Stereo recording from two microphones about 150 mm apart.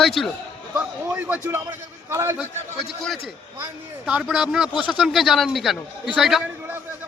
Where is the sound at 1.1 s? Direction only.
10° right (ahead or behind).